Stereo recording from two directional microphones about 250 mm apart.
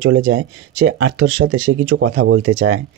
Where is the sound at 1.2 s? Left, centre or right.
Right.